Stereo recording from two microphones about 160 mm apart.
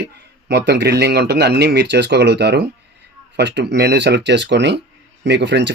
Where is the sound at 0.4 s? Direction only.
90° right.